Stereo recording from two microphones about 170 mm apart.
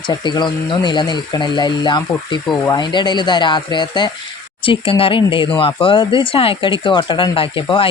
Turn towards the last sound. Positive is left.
turn(degrees=30)  # may be behind; listen again after turning